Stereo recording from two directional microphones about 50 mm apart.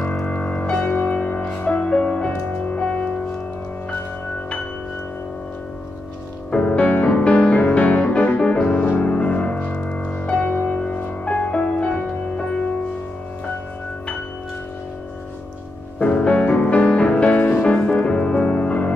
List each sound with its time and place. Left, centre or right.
0.3 s music: left
6.5 s music: left
10.5 s music: left
16.0 s music: left